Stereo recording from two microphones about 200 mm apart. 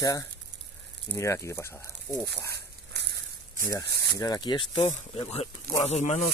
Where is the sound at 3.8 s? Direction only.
50° right (ahead or behind).